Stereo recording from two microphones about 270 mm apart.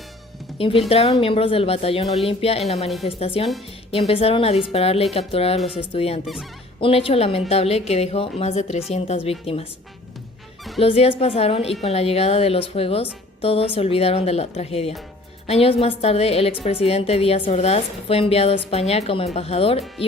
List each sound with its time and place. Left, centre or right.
0.9 s a woman's voice: left
10.8 s a woman's voice: left